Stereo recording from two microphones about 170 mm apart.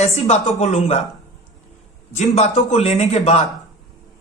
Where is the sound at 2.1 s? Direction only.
40° left (ahead or behind).